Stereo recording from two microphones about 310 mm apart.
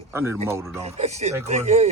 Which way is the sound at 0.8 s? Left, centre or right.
Right.